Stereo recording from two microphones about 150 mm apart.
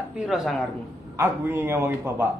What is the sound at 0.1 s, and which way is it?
Speech, 5° right (ahead or behind).